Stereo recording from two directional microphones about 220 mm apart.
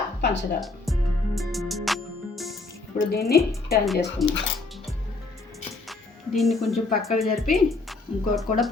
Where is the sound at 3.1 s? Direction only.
45° left (ahead or behind).